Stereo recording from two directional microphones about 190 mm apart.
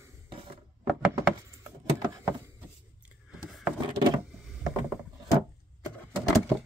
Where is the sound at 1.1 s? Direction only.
15° right (ahead or behind).